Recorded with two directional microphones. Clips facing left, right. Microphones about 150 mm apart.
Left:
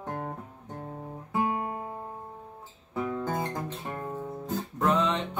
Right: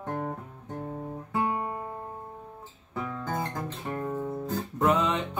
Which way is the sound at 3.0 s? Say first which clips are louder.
Left 2 dB; 20° left (ahead or behind).